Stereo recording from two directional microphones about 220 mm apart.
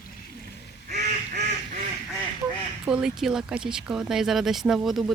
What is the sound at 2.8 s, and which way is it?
Speech, 5° right (ahead or behind).